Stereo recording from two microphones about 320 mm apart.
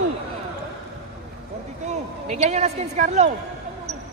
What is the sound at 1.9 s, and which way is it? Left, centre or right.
A man's voice, right.